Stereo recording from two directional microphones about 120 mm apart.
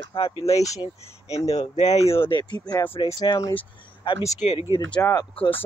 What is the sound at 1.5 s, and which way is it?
Speech, 65° left (ahead or behind).